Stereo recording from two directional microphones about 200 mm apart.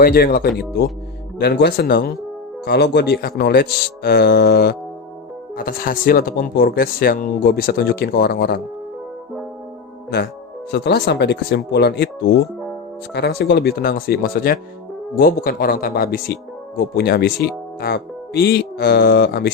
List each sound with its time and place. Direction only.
0.0 s speech: 50° left (ahead or behind)
10.7 s speech: 55° left (ahead or behind)